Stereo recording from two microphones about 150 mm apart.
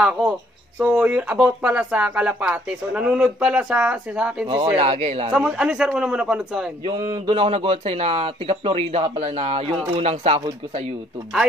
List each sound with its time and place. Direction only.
0.0 s speech: 5° right (ahead or behind)
4.7 s a man's voice: 45° right (ahead or behind)
5.3 s a man's voice: 5° right (ahead or behind)
6.8 s speech: 25° right (ahead or behind)
7.2 s speech: 40° right (ahead or behind)